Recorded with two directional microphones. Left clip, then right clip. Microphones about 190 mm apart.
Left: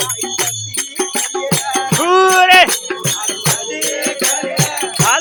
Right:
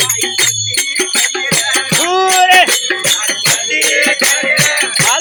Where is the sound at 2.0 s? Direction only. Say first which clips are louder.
Left 2 dB; 20° left (ahead or behind).